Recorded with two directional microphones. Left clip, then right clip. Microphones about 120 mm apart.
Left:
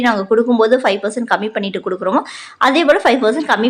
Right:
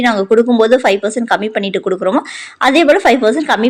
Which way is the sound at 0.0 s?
25° right (ahead or behind).